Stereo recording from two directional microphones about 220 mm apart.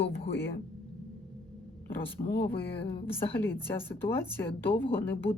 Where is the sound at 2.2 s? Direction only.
30° left (ahead or behind).